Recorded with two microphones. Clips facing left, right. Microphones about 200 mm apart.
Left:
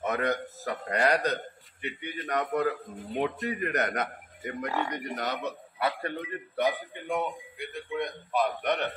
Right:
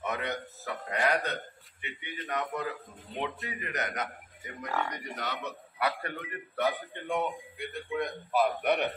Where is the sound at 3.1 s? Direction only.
55° left (ahead or behind).